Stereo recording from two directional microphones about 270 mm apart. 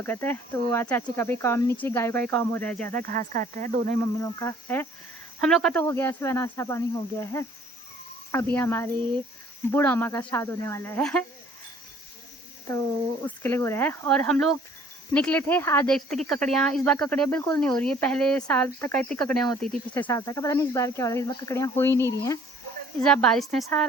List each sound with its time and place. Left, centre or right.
0.0 s speech: centre
2.9 s speech: right
4.2 s speech: centre
8.5 s speech: centre
13.2 s speech: centre